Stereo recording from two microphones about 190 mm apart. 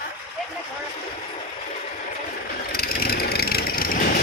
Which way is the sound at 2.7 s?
55° left (ahead or behind).